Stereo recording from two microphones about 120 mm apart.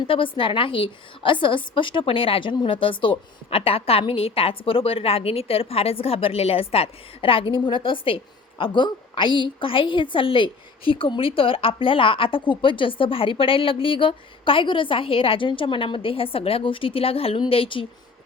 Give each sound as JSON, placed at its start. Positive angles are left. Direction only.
{"t": 0.1, "sound": "a woman's voice", "side_deg": 45}